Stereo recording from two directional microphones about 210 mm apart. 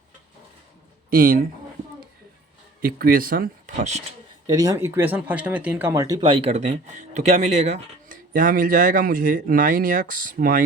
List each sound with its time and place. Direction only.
1.1 s speech: 45° right (ahead or behind)
2.8 s speech: 45° right (ahead or behind)
4.4 s speech: 15° right (ahead or behind); by 10.6 s 40° right (ahead or behind)